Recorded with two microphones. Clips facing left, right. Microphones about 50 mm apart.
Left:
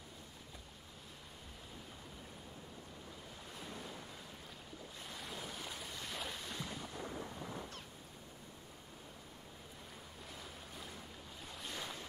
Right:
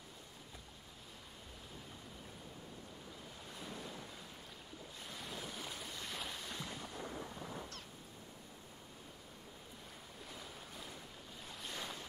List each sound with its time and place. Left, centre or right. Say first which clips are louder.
5.0 s waves: even; centre
11.4 s waves: even; centre